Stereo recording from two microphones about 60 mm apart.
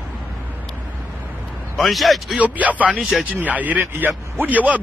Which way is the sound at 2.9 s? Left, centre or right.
Centre.